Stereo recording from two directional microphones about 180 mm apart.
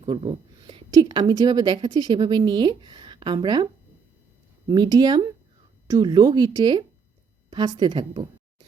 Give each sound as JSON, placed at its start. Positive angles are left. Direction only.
{"t": 0.0, "sound": "speech", "side_deg": -30}
{"t": 4.7, "sound": "speech", "side_deg": -25}